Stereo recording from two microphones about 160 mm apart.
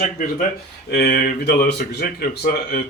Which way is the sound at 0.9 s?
70° left (ahead or behind).